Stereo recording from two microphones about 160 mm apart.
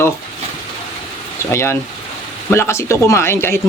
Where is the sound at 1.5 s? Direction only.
15° left (ahead or behind).